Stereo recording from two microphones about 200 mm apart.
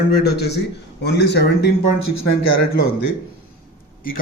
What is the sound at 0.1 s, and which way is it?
Speech, 55° left (ahead or behind).